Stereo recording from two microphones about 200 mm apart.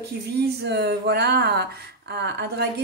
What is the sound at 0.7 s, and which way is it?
Speech, 55° right (ahead or behind).